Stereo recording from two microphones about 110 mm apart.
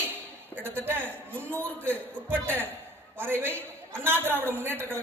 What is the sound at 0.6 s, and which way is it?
A man's voice, 20° right (ahead or behind).